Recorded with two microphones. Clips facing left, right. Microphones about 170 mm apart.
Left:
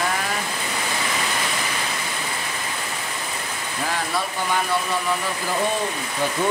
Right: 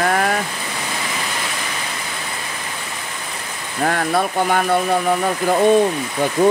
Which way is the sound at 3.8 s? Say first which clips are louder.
Right 8 dB; 55° right (ahead or behind).